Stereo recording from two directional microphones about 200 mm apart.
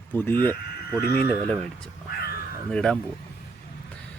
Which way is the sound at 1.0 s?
50° left (ahead or behind).